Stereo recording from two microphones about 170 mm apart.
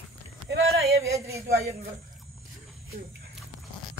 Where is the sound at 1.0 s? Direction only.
20° right (ahead or behind).